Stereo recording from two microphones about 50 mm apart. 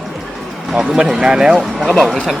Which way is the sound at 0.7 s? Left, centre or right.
Centre.